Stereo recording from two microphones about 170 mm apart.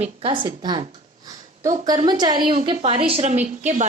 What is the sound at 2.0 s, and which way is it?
Speech, 25° right (ahead or behind).